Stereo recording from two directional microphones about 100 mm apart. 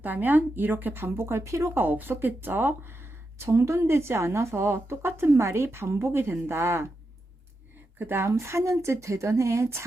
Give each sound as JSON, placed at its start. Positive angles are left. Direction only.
{"t": 0.0, "sound": "speech", "side_deg": -20}
{"t": 1.8, "sound": "speech", "side_deg": -20}
{"t": 7.9, "sound": "speech", "side_deg": -25}